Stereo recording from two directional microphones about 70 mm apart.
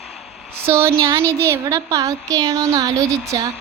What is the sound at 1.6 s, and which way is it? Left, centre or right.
A woman's voice, right.